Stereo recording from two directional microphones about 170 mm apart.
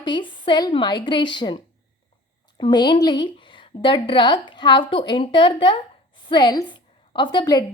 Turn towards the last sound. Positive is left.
turn(degrees=25)  # may be behind; listen again after turning